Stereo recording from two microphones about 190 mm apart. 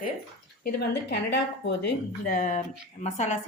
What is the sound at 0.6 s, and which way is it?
A woman's voice, 55° left (ahead or behind).